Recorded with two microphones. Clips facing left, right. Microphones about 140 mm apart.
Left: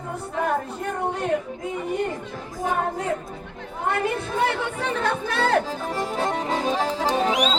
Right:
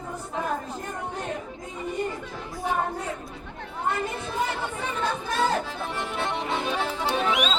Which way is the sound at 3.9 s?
65° left (ahead or behind).